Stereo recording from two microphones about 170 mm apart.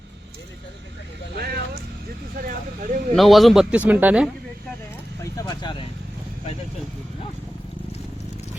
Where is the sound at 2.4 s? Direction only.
55° right (ahead or behind).